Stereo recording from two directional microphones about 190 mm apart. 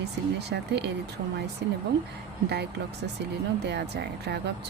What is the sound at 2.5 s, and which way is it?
Speech, 60° right (ahead or behind).